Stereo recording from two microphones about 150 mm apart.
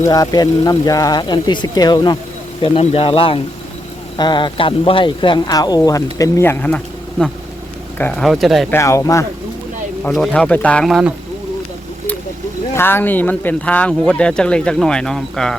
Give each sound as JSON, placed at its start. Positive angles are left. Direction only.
{"t": 0.0, "sound": "speech", "side_deg": 25}
{"t": 2.6, "sound": "speech", "side_deg": 40}
{"t": 8.2, "sound": "speech", "side_deg": 0}
{"t": 8.7, "sound": "speech", "side_deg": 20}
{"t": 10.2, "sound": "speech", "side_deg": 10}
{"t": 12.7, "sound": "speech", "side_deg": 15}